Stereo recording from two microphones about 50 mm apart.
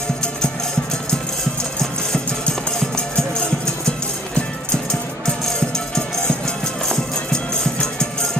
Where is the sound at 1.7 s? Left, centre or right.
Centre.